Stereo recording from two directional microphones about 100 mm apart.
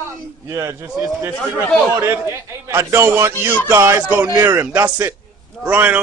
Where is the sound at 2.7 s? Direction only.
25° right (ahead or behind).